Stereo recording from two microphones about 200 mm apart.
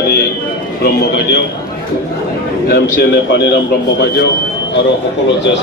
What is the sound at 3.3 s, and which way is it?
Speech, 60° left (ahead or behind).